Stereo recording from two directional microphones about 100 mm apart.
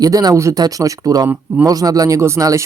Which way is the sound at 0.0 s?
40° right (ahead or behind).